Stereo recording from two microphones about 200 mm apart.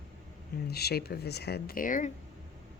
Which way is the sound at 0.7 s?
55° left (ahead or behind).